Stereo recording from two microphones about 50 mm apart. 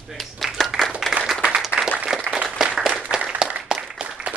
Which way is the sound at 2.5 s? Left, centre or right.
Centre.